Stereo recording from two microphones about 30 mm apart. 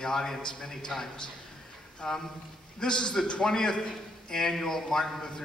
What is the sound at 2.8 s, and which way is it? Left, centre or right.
A man's voice, left.